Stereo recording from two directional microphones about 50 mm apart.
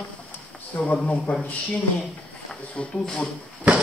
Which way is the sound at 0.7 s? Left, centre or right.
Left.